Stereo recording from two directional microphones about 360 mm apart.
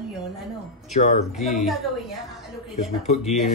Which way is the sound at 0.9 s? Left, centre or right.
Centre.